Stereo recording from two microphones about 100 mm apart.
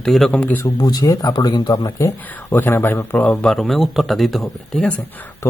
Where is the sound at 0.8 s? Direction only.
45° left (ahead or behind); by 4.8 s centre (ahead or behind).